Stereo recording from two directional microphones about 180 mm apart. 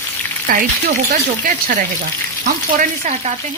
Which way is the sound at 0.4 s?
50° right (ahead or behind).